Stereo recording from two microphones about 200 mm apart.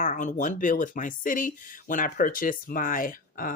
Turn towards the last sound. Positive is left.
turn(degrees=45)  # may be behind; listen again after turning